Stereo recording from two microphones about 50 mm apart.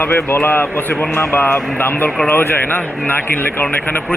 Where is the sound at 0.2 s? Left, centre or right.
Left.